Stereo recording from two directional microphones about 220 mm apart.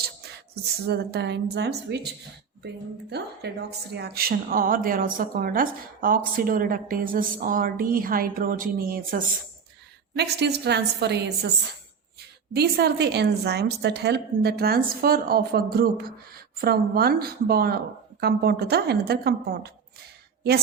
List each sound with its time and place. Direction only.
0.5 s a woman's voice: 45° right (ahead or behind)
3.1 s a woman's voice: 50° right (ahead or behind)
12.5 s a woman's voice: 45° right (ahead or behind)